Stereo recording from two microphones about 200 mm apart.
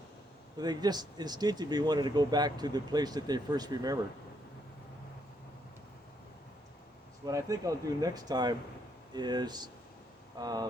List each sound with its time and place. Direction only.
0.6 s speech: 20° right (ahead or behind)
7.3 s speech: 15° right (ahead or behind)